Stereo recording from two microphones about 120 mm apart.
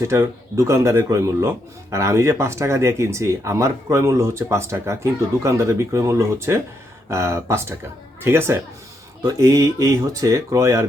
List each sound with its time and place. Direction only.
0.0 s speech: 25° right (ahead or behind)